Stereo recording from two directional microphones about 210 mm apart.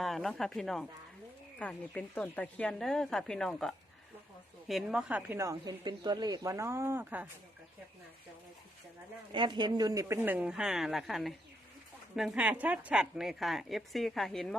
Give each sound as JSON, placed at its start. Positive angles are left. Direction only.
{"t": 0.0, "sound": "a woman's voice", "side_deg": 0}
{"t": 9.3, "sound": "a woman's voice", "side_deg": -20}